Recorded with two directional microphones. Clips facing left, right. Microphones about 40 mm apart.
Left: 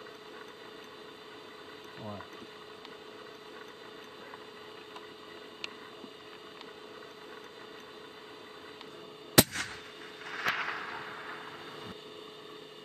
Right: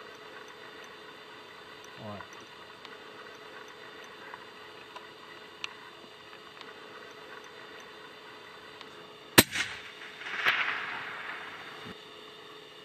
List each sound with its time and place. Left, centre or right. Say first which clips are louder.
9.4 s artillery fire: right 3 dB; right
10.2 s whip: right 5 dB; right